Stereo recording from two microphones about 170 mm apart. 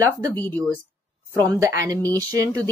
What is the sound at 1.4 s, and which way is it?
Speech, 20° right (ahead or behind).